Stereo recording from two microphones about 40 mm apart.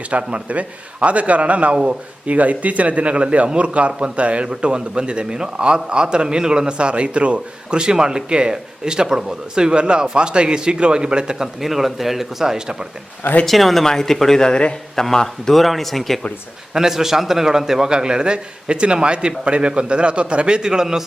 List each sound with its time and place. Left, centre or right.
0.1 s a man's voice: right
1.7 s speech: right
2.2 s speech: right
11.6 s speech: centre
13.4 s a man's voice: centre; by 15.0 s left
15.1 s speech: centre
16.7 s speech: centre